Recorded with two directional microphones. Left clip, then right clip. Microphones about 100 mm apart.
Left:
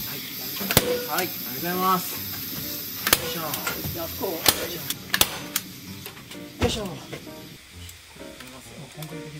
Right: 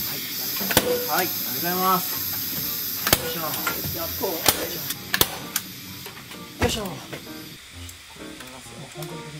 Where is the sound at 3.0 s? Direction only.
5° left (ahead or behind).